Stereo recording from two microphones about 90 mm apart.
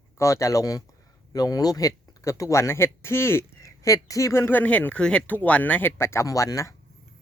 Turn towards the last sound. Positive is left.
turn(degrees=35)  # may be behind; listen again after turning